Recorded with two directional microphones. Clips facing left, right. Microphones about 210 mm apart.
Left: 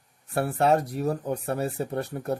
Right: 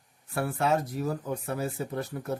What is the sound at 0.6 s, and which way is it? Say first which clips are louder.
Speech: left 5 dB; 65° left (ahead or behind).